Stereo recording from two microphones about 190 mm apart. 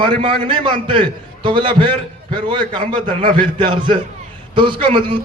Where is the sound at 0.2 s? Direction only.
25° right (ahead or behind).